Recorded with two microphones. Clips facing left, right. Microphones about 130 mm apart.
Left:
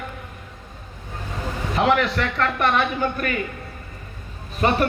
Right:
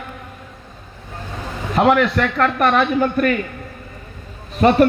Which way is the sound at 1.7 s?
45° right (ahead or behind).